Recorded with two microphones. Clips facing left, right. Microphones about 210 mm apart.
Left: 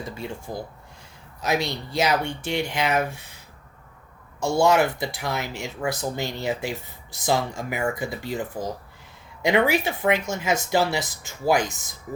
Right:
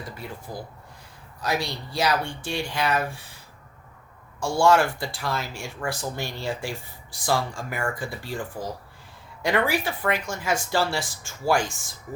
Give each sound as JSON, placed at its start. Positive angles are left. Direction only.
{"t": 0.0, "sound": "speech", "side_deg": 25}
{"t": 4.4, "sound": "speech", "side_deg": 20}